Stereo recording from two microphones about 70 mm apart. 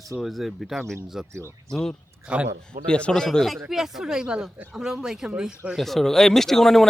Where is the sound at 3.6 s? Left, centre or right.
Centre.